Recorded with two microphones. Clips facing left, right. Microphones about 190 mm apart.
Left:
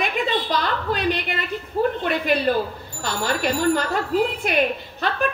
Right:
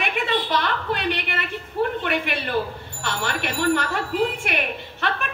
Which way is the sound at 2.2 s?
40° left (ahead or behind).